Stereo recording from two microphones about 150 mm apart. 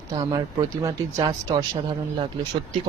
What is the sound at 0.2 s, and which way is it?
Speech, 25° right (ahead or behind).